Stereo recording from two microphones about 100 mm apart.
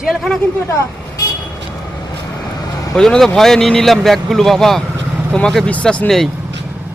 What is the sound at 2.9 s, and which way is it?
Speech, 5° left (ahead or behind).